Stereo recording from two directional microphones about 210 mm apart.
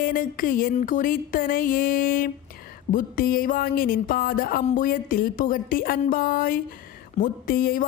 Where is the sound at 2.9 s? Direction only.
40° left (ahead or behind).